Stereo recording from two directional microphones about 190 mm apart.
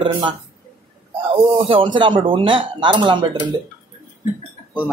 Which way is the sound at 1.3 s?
30° right (ahead or behind).